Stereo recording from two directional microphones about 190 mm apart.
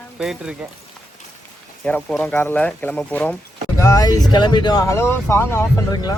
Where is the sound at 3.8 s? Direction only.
20° left (ahead or behind).